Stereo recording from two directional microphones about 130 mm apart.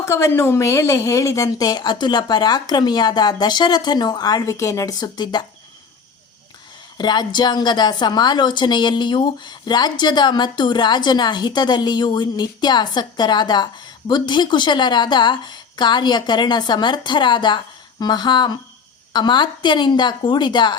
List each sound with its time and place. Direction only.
0.0 s a woman's voice: 20° left (ahead or behind)
6.9 s a woman's voice: 35° left (ahead or behind)